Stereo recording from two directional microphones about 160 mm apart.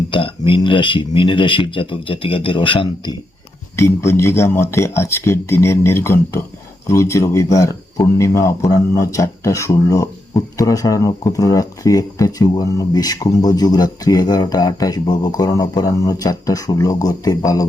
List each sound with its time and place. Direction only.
0.1 s speech: 35° left (ahead or behind)
3.8 s speech: 15° left (ahead or behind)